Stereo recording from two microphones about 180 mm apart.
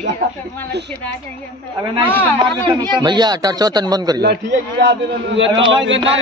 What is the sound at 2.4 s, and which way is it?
A man's voice, 25° right (ahead or behind).